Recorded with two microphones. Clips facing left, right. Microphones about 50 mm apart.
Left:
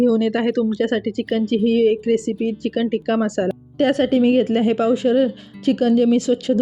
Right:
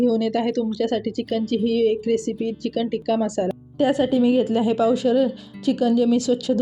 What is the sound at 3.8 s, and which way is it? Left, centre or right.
A woman's voice, left.